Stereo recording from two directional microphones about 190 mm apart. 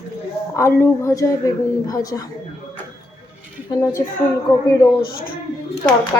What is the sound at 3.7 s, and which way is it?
Speech, 15° left (ahead or behind).